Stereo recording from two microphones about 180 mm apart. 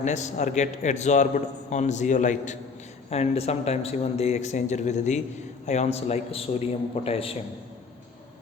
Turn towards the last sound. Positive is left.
turn(degrees=30)  # may be behind; listen again after turning